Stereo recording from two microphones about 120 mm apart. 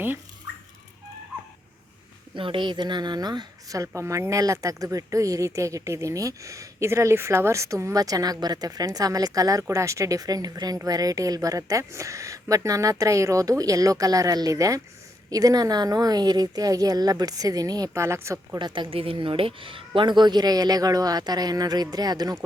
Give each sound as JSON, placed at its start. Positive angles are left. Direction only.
{"t": 2.3, "sound": "a woman's voice", "side_deg": -45}
{"t": 18.6, "sound": "speech", "side_deg": -40}